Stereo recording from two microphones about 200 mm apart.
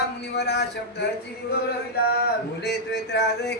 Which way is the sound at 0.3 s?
55° left (ahead or behind).